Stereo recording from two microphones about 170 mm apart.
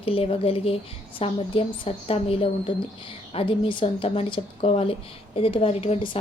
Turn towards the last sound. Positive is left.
turn(degrees=35)  # may be behind; listen again after turning